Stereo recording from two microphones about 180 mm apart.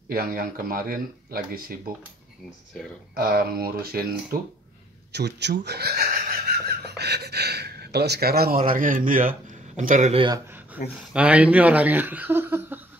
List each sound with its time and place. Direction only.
0.1 s speech: 55° right (ahead or behind)
3.2 s speech: 55° right (ahead or behind)
5.1 s speech: 70° right (ahead or behind); by 10.2 s 40° right (ahead or behind)
10.8 s speech: 50° left (ahead or behind)
11.1 s speech: 5° right (ahead or behind)